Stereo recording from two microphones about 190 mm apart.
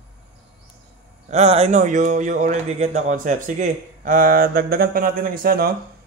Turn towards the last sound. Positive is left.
turn(degrees=-50)  # may be behind; listen again after turning